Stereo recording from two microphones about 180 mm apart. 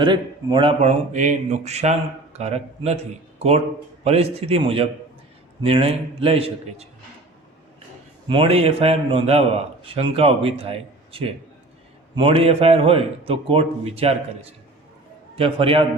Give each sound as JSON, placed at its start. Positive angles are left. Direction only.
{"t": 0.0, "sound": "a man's voice", "side_deg": -25}
{"t": 8.3, "sound": "a man's voice", "side_deg": -30}